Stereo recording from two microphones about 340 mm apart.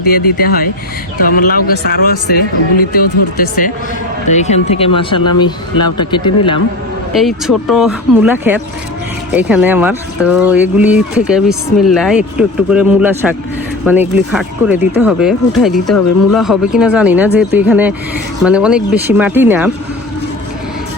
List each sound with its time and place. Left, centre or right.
0.1 s speech: left
7.2 s speech: centre